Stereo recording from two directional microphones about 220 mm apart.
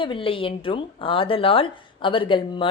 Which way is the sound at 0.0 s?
25° left (ahead or behind).